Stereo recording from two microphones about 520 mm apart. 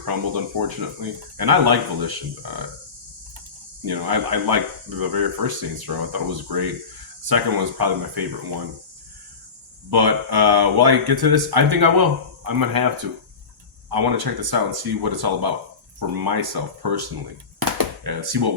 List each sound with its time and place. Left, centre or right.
0.0 s speech: right
3.8 s speech: right
9.9 s speech: right
17.7 s a sound: right